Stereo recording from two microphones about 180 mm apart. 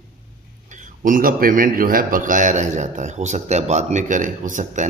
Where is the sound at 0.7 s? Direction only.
45° right (ahead or behind).